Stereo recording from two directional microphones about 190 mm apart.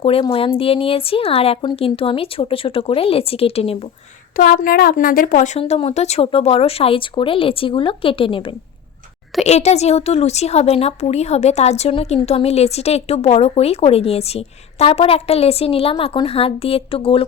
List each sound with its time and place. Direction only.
0.0 s speech: 30° left (ahead or behind)
4.4 s speech: 50° left (ahead or behind); by 17.2 s 30° left (ahead or behind)